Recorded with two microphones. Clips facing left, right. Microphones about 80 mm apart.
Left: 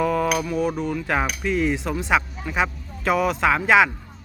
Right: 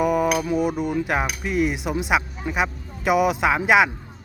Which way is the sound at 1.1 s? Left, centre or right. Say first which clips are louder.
Even; centre.